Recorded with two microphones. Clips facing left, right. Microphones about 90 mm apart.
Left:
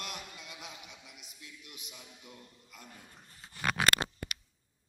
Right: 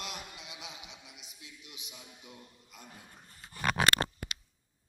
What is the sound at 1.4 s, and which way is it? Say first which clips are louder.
A man's voice: left 1 dB; 20° right (ahead or behind).